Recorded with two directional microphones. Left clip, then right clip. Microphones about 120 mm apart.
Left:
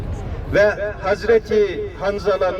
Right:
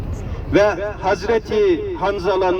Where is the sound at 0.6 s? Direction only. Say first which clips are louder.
Even; 40° left (ahead or behind).